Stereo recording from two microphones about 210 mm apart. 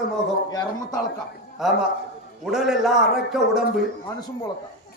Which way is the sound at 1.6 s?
Centre (ahead or behind).